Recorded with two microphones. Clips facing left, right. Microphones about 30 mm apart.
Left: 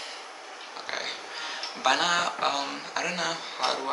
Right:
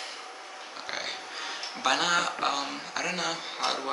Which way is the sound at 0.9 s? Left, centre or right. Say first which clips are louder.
Left 1 dB; centre.